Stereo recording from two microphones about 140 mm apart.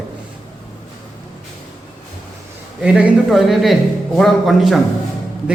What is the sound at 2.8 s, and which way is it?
A man's voice, 10° right (ahead or behind).